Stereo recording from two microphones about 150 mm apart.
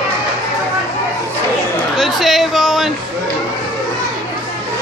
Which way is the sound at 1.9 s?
Centre (ahead or behind).